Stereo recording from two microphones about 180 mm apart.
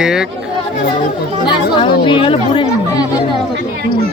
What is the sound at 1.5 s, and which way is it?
Speech, 25° left (ahead or behind).